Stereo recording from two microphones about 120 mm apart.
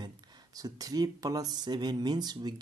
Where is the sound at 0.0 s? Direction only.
30° right (ahead or behind).